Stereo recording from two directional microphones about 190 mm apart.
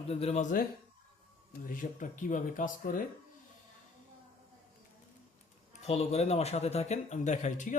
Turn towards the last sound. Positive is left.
turn(degrees=40)  # may be behind; listen again after turning